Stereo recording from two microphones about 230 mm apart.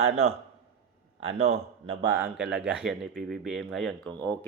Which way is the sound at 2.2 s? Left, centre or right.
Centre.